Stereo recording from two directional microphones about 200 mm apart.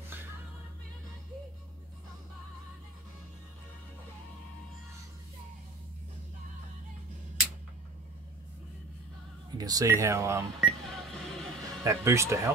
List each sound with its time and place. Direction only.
9.6 s speech: 20° right (ahead or behind)
10.6 s a sound: centre (ahead or behind)
11.6 s speech: 15° right (ahead or behind)